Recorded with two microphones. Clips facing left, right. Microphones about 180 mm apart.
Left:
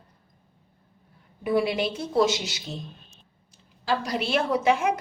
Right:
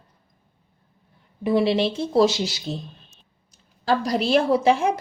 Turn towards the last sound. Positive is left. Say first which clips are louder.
# right 4 dB
turn(degrees=-30)  # may be behind; listen again after turning